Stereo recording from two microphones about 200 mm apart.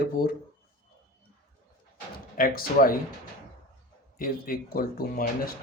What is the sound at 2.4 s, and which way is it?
Speech, 45° left (ahead or behind).